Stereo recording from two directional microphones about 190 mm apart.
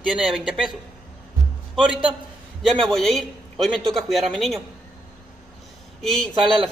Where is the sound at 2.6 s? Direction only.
Centre (ahead or behind).